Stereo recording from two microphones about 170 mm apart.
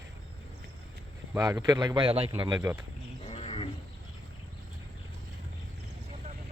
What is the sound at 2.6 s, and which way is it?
Speech, 15° right (ahead or behind).